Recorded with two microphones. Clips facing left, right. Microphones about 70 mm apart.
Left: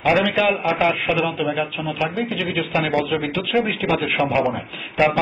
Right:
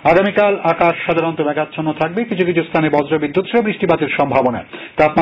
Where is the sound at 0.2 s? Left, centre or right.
Right.